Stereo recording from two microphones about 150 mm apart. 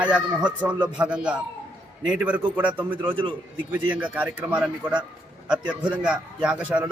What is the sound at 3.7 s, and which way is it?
A man's voice, 10° right (ahead or behind).